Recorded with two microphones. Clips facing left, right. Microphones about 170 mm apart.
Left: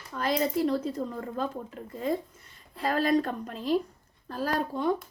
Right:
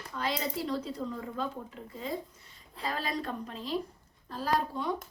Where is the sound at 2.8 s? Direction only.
55° left (ahead or behind).